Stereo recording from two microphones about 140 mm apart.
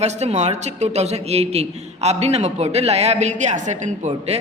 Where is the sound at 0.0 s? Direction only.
50° right (ahead or behind).